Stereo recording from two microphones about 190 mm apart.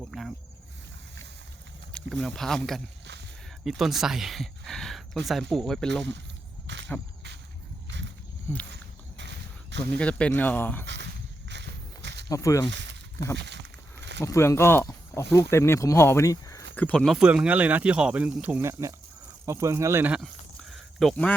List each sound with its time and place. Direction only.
0.0 s cricket: centre (ahead or behind)
1.9 s a sound: 5° left (ahead or behind)
2.2 s speech: centre (ahead or behind)
3.6 s speech: centre (ahead or behind)
6.7 s a sound: 70° right (ahead or behind)
7.9 s a sound: 70° right (ahead or behind)
8.7 s walk: 70° right (ahead or behind)
10.0 s speech: 5° left (ahead or behind)
11.4 s walk: 65° right (ahead or behind)
12.3 s speech: 15° left (ahead or behind)
12.6 s speech: 70° right (ahead or behind)
13.3 s a sound: 65° right (ahead or behind)
14.3 s speech: 15° left (ahead or behind)